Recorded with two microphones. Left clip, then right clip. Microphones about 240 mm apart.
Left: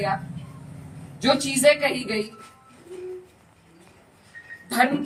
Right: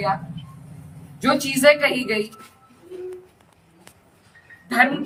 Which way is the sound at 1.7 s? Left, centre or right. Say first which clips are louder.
Right 4 dB; right.